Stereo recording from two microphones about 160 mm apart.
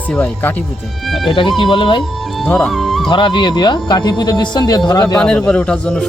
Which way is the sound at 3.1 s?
30° left (ahead or behind).